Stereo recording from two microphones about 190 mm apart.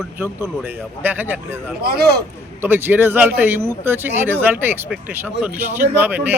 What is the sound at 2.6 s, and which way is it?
Speech, 10° right (ahead or behind).